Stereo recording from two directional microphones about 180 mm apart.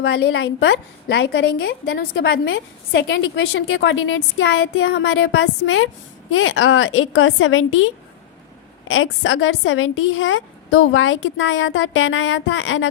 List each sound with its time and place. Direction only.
0.0 s a woman's voice: 80° left
8.9 s a woman's voice: 90° left